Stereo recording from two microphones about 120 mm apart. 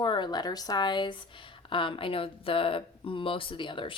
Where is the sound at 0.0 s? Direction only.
40° left (ahead or behind).